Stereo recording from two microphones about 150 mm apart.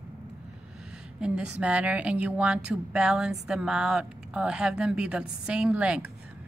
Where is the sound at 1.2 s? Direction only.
5° right (ahead or behind).